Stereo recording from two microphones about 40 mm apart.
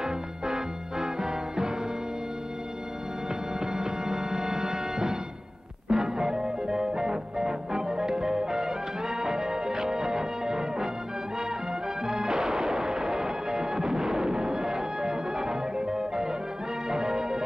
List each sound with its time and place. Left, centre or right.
0.0 s music: centre
3.7 s music: centre
12.1 s music: centre